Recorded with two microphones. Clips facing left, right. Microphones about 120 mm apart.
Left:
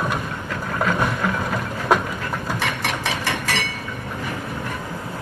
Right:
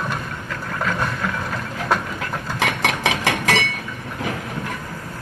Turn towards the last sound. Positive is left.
turn(degrees=-90)